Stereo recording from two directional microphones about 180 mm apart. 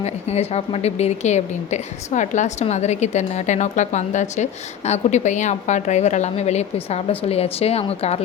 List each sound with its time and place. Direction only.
0.0 s a woman's voice: 35° left (ahead or behind)